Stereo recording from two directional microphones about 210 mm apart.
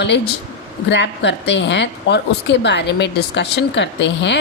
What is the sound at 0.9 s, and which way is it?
A woman's voice, 55° left (ahead or behind).